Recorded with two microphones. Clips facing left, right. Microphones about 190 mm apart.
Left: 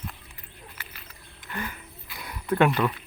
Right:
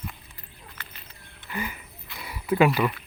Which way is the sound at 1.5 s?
10° right (ahead or behind).